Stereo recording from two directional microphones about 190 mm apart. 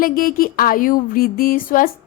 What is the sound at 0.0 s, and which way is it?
A woman's voice, 50° left (ahead or behind).